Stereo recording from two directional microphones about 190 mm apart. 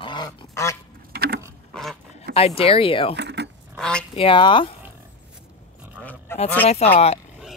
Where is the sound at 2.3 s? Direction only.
30° left (ahead or behind).